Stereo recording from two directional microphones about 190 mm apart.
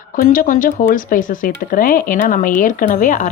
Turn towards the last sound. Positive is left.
turn(degrees=45)  # may be behind; listen again after turning